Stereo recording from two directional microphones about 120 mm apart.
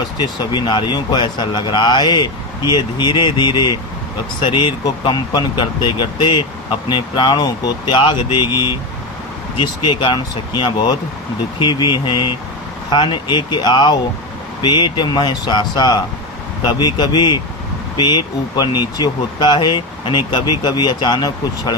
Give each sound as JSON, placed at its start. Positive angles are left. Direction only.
{"t": 0.2, "sound": "speech", "side_deg": 40}
{"t": 9.6, "sound": "speech", "side_deg": 40}